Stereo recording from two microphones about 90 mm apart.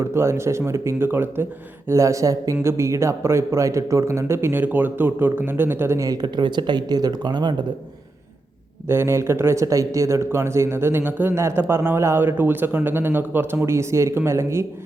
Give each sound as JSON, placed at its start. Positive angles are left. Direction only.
{"t": 0.0, "sound": "speech", "side_deg": -30}
{"t": 1.9, "sound": "a man's voice", "side_deg": -35}
{"t": 6.1, "sound": "speech", "side_deg": -50}
{"t": 8.9, "sound": "a man's voice", "side_deg": -30}